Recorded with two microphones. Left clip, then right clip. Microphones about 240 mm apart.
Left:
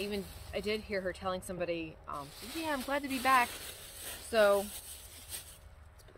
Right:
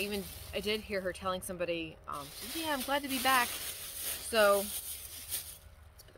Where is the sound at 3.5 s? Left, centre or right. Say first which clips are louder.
Right 4 dB; centre.